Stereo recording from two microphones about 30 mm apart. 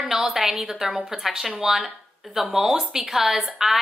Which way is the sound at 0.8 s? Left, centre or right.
Centre.